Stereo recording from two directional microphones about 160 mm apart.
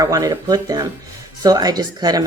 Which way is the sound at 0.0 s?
20° right (ahead or behind).